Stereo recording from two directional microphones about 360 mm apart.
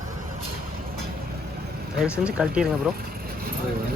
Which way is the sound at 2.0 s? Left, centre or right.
Centre.